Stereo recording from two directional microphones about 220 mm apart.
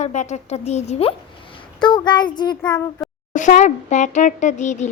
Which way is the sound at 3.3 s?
35° left (ahead or behind).